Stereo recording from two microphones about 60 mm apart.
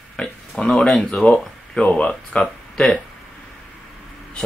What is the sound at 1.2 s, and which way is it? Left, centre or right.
Speech, centre.